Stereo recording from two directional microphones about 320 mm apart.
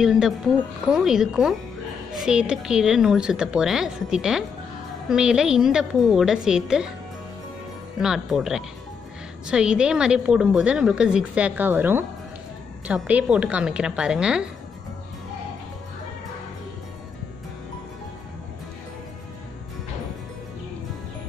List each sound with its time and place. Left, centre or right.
0.0 s a woman's voice: centre
8.0 s a woman's voice: centre